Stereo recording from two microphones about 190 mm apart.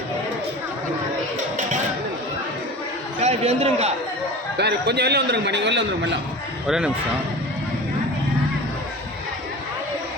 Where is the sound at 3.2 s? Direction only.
35° right (ahead or behind).